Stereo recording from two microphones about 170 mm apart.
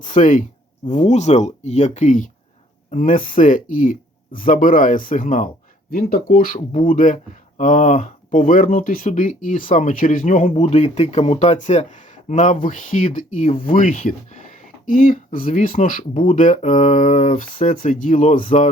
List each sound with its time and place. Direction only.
0.0 s speech: 50° left (ahead or behind)